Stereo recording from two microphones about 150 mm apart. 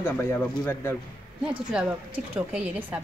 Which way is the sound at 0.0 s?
15° left (ahead or behind).